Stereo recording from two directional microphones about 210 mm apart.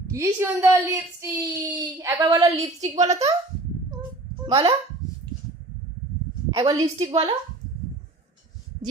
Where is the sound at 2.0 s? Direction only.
15° right (ahead or behind).